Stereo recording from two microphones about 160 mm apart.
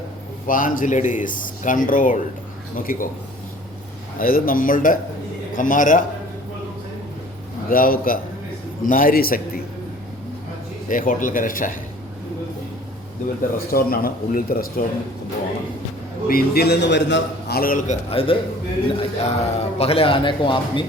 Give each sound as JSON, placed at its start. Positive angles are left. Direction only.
{"t": 0.4, "sound": "speech", "side_deg": 60}
{"t": 4.2, "sound": "speech", "side_deg": 60}
{"t": 7.7, "sound": "speech", "side_deg": 65}
{"t": 10.8, "sound": "speech", "side_deg": 55}
{"t": 13.7, "sound": "speech", "side_deg": 70}
{"t": 16.3, "sound": "a man's voice", "side_deg": 90}
{"t": 18.1, "sound": "a man's voice", "side_deg": 35}